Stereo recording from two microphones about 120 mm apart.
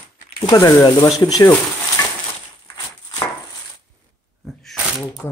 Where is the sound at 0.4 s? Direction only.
30° left (ahead or behind).